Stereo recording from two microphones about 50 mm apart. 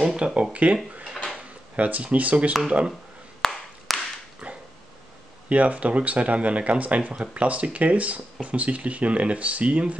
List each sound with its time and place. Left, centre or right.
0.0 s speech: centre
1.8 s speech: right
3.4 s clapping: centre
4.4 s dog: right
5.5 s speech: right